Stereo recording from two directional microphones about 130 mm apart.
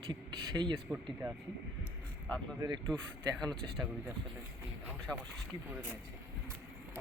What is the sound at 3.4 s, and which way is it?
Speech, 5° left (ahead or behind).